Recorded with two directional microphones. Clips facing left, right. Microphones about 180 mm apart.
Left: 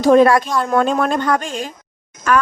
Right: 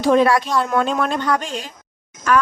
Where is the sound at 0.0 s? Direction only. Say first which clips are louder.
Left 4 dB; 45° left (ahead or behind).